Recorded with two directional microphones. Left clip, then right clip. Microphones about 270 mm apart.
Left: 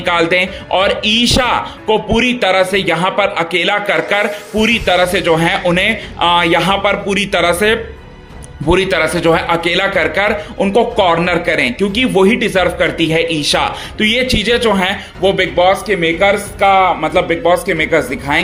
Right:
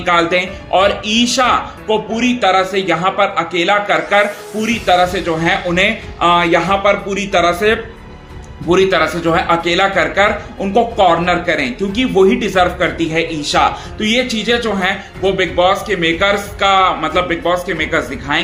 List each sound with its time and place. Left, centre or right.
0.0 s a man's voice: left